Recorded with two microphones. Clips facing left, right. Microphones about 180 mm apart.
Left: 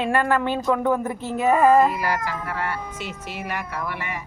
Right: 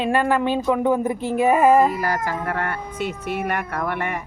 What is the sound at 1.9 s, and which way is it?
Speech, 45° right (ahead or behind).